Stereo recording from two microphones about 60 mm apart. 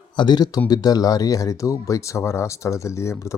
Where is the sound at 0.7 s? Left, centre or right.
Left.